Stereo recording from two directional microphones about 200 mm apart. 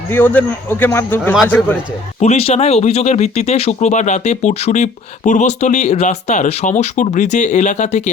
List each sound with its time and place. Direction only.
0.1 s a man's voice: 10° left (ahead or behind)
2.2 s speech: 30° left (ahead or behind)